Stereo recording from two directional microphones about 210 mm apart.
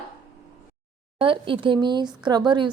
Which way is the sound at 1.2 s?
25° right (ahead or behind).